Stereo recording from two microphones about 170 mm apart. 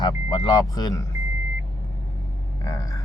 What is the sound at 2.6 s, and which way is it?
Speech, 20° left (ahead or behind).